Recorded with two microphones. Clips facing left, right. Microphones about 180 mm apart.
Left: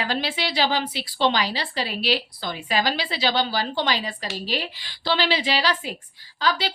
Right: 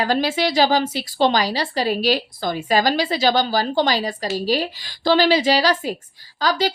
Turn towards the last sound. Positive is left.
turn(degrees=-40)  # may be behind; listen again after turning